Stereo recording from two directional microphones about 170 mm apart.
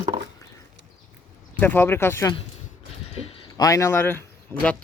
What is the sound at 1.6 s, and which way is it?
Speech, 10° left (ahead or behind).